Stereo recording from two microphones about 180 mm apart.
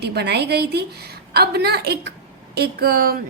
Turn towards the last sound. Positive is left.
turn(degrees=-55)  # may be behind; listen again after turning